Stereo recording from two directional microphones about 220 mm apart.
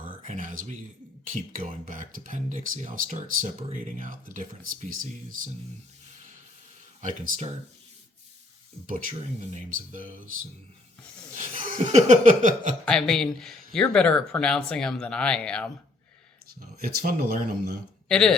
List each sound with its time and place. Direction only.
0.0 s a sound: 35° right (ahead or behind)
1.2 s speech: 35° right (ahead or behind)
7.0 s speech: 30° right (ahead or behind)
8.9 s speech: 35° right (ahead or behind)
11.5 s a sound: 30° right (ahead or behind)
12.8 s speech: 5° left (ahead or behind)
16.6 s speech: 45° right (ahead or behind)
18.1 s speech: 5° left (ahead or behind)